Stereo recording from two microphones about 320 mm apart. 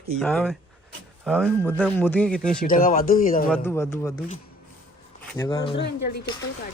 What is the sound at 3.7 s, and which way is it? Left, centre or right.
Speech, centre.